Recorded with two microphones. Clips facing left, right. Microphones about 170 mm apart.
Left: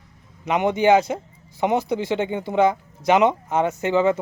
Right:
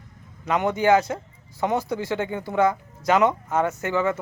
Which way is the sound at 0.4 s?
20° left (ahead or behind).